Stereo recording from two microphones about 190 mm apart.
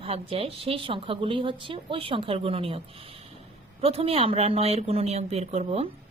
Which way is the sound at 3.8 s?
30° right (ahead or behind).